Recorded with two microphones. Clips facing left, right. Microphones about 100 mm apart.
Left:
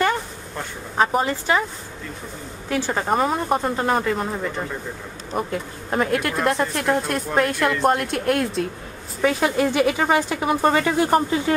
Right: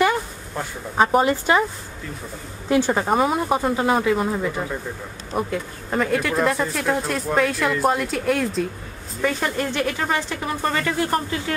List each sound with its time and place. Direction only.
0.0 s a sound: 5° right (ahead or behind)
1.2 s speech: 15° right (ahead or behind)
2.9 s speech: 5° right (ahead or behind); by 11.5 s 25° left (ahead or behind)